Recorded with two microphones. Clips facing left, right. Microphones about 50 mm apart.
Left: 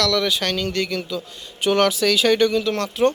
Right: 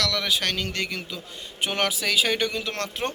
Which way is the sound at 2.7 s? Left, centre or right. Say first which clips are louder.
Left 5 dB; right.